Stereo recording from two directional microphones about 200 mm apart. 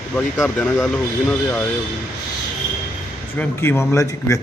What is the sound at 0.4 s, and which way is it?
Speech, centre (ahead or behind).